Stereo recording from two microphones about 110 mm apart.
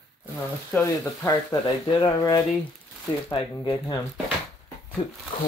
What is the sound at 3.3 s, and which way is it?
Speech, 45° left (ahead or behind).